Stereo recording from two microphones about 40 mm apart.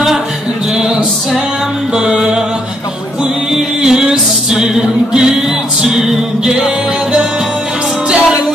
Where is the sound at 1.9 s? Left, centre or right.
Centre.